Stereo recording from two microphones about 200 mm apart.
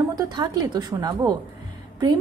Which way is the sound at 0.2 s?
20° right (ahead or behind).